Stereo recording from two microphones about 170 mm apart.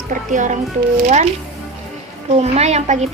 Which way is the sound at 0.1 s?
45° right (ahead or behind).